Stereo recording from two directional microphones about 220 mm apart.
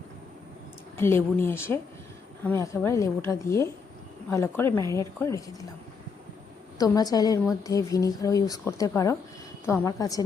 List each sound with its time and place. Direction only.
0.9 s a woman's voice: 10° left (ahead or behind)
6.7 s a woman's voice: 15° left (ahead or behind)